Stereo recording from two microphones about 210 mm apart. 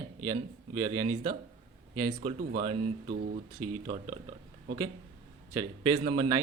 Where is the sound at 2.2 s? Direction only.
35° right (ahead or behind).